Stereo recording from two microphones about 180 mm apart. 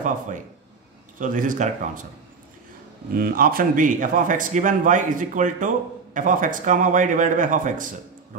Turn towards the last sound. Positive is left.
turn(degrees=-45)  # may be behind; listen again after turning